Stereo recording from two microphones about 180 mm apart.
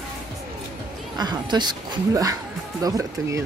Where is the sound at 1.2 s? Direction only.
25° right (ahead or behind).